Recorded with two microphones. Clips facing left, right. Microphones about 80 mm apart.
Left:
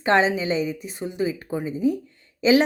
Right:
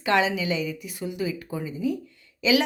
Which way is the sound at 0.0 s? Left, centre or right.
Left.